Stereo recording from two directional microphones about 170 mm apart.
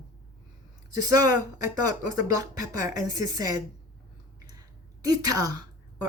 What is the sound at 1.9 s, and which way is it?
Speech, 20° right (ahead or behind).